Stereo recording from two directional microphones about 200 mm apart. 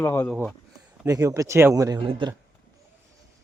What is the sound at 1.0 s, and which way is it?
Speech, 15° right (ahead or behind).